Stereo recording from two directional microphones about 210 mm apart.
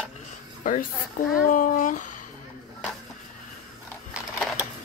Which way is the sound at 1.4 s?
40° left (ahead or behind).